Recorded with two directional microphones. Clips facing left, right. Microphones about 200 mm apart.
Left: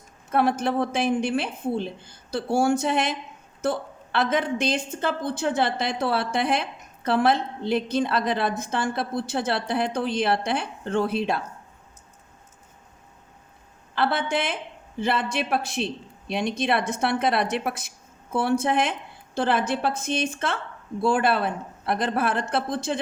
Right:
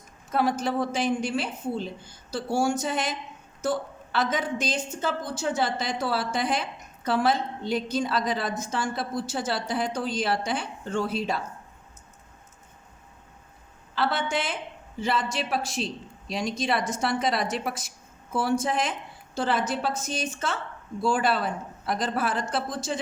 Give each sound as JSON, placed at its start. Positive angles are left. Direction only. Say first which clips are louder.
{"t": 0.3, "sound": "a woman's voice", "louder": "left 3 dB", "side_deg": 60}
{"t": 13.9, "sound": "a woman's voice", "louder": "left 2 dB", "side_deg": 55}